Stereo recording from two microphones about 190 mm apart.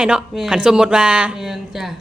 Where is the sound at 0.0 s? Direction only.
5° right (ahead or behind).